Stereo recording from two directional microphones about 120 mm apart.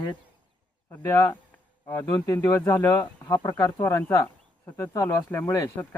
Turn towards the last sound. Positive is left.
turn(degrees=25)  # may be behind; listen again after turning